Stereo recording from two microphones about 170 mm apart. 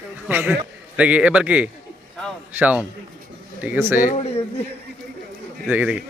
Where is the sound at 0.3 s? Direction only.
10° right (ahead or behind).